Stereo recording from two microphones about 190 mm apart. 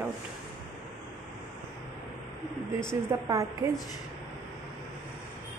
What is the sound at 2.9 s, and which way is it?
Speech, 15° right (ahead or behind).